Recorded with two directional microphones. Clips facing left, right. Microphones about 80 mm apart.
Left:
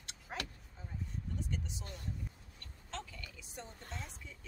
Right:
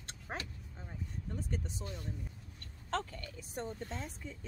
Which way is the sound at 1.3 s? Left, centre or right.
Right.